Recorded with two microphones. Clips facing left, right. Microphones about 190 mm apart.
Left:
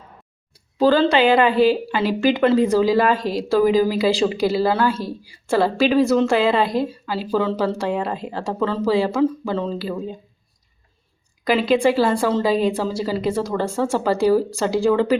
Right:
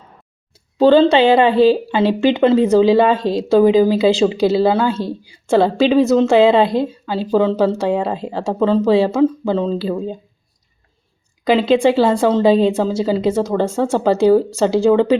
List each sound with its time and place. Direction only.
0.8 s speech: 25° right (ahead or behind)
11.4 s speech: 25° right (ahead or behind)